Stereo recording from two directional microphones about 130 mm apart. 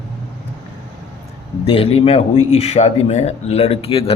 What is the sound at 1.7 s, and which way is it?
Speech, 45° left (ahead or behind).